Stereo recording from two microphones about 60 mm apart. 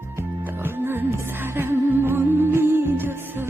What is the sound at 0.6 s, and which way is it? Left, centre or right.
Music, right.